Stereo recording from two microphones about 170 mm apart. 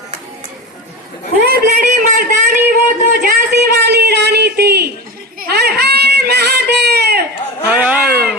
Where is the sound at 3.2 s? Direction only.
60° right (ahead or behind).